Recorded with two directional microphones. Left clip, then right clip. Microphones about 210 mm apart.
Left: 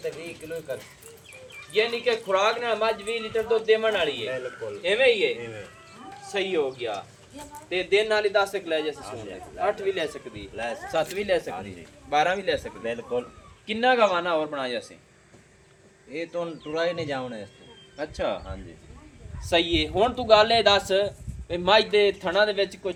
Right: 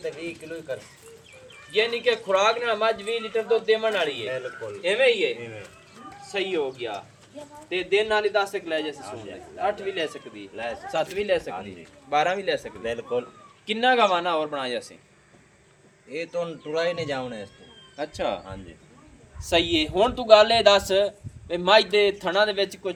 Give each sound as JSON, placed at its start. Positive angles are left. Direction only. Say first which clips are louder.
{"t": 0.0, "sound": "a man's voice", "louder": "right 1 dB", "side_deg": -40}
{"t": 4.9, "sound": "a man's voice", "louder": "even", "side_deg": -20}
{"t": 6.2, "sound": "a man's voice", "louder": "left 1 dB", "side_deg": 0}
{"t": 10.9, "sound": "a man's voice", "louder": "even", "side_deg": 5}
{"t": 12.1, "sound": "a man's voice", "louder": "even", "side_deg": -5}
{"t": 12.8, "sound": "a man's voice", "louder": "right 1 dB", "side_deg": -45}
{"t": 16.1, "sound": "a man's voice", "louder": "right 2 dB", "side_deg": -55}